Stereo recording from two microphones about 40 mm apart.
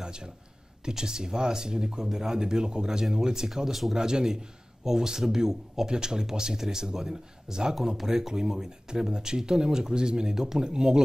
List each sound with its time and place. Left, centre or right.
0.0 s a sound: right
0.8 s speech: centre
3.9 s speech: centre